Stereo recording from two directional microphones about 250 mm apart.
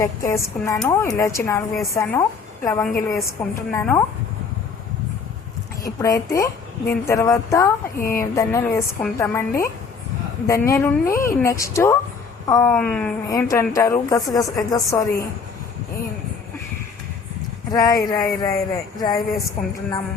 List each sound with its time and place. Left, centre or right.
0.0 s a woman's voice: centre
5.8 s a woman's voice: centre
17.7 s a woman's voice: centre